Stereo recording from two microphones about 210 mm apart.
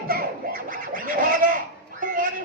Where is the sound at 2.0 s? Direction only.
40° right (ahead or behind).